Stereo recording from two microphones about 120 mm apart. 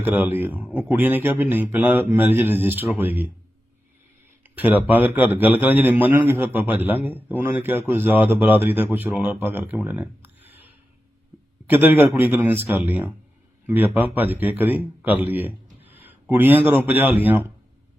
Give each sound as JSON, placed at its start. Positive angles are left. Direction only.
{"t": 0.0, "sound": "a man's voice", "side_deg": -15}
{"t": 4.5, "sound": "a man's voice", "side_deg": -15}